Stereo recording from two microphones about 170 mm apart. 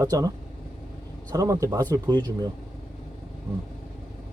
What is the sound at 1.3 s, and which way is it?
Speech, 20° right (ahead or behind).